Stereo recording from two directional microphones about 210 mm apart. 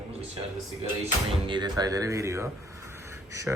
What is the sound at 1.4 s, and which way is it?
Speech, 20° right (ahead or behind).